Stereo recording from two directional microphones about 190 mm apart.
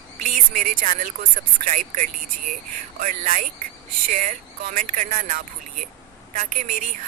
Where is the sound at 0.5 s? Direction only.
45° right (ahead or behind).